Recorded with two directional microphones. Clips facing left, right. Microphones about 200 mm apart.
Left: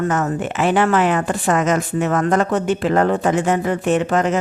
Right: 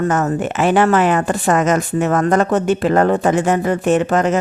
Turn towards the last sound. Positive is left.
turn(degrees=-45)  # may be behind; listen again after turning